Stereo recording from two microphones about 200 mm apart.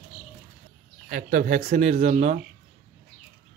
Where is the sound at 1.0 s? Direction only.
45° right (ahead or behind).